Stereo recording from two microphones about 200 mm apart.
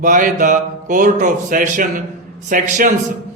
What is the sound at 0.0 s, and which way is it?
Speech, 40° right (ahead or behind).